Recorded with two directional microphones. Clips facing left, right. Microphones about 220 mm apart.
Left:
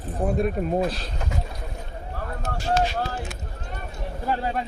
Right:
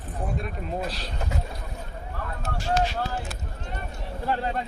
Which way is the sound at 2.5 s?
40° left (ahead or behind).